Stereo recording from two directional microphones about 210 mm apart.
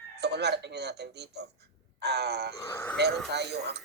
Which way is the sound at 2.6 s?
10° left (ahead or behind).